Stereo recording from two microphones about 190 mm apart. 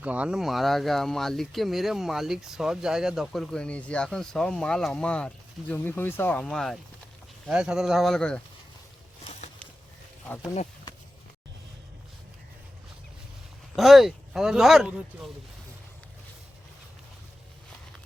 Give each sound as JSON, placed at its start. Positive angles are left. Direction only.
{"t": 0.0, "sound": "speech", "side_deg": -5}
{"t": 9.2, "sound": "a sound", "side_deg": 35}
{"t": 13.7, "sound": "speech", "side_deg": 0}